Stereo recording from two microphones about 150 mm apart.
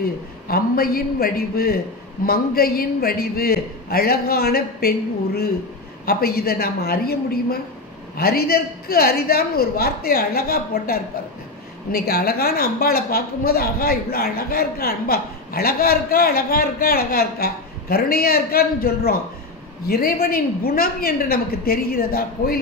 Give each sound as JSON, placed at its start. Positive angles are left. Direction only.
{"t": 0.5, "sound": "a woman's voice", "side_deg": 80}